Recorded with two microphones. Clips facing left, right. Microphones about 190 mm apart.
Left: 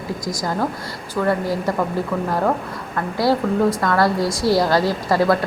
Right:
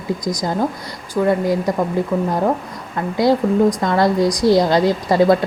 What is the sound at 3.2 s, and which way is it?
A woman's voice, 20° right (ahead or behind).